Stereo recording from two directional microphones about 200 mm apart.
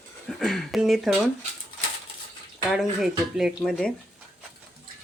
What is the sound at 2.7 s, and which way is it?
Speech, centre (ahead or behind).